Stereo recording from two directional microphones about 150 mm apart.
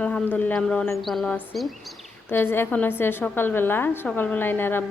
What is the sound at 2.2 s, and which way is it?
A woman's voice, 15° left (ahead or behind).